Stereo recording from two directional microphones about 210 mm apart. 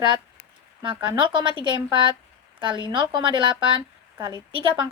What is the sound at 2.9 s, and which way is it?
A woman's voice, 20° right (ahead or behind).